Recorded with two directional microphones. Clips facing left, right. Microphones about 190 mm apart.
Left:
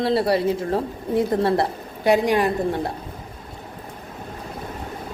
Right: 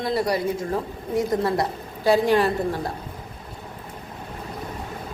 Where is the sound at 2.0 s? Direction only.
15° left (ahead or behind).